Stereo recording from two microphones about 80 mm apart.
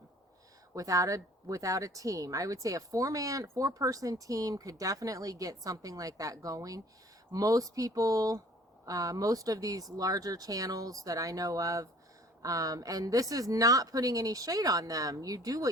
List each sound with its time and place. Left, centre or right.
0.7 s speech: right